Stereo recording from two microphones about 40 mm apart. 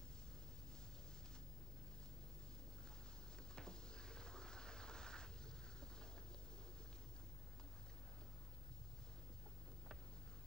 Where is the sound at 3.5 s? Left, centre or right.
Left.